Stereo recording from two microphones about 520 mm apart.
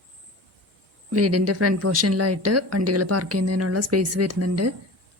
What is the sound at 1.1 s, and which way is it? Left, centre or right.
Speech, right.